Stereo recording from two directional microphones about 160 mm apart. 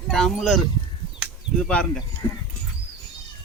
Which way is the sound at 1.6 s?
5° left (ahead or behind).